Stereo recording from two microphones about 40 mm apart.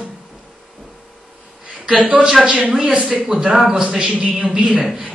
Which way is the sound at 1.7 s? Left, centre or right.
Right.